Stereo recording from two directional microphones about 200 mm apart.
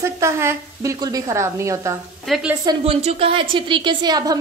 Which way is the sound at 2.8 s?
30° right (ahead or behind).